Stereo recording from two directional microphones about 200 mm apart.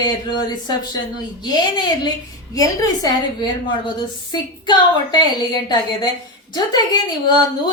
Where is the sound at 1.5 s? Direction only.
20° left (ahead or behind).